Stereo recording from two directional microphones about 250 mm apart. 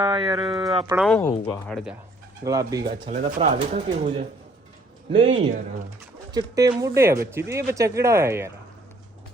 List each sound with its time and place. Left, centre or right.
0.0 s speech: centre
0.5 s speech: centre
2.4 s speech: centre
3.1 s speech: right; by 8.4 s centre